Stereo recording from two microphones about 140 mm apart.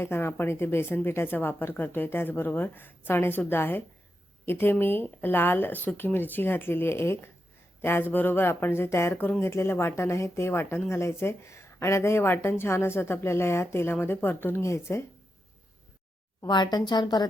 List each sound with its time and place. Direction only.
0.0 s speech: 15° left (ahead or behind)
16.5 s a woman's voice: 30° left (ahead or behind)